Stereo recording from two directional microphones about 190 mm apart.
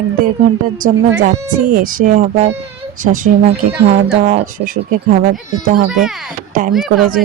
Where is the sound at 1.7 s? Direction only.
45° right (ahead or behind).